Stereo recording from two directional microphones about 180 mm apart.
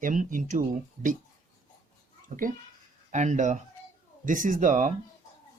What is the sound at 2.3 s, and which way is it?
Speech, 45° right (ahead or behind).